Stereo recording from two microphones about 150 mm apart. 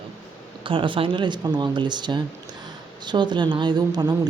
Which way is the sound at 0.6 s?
35° right (ahead or behind).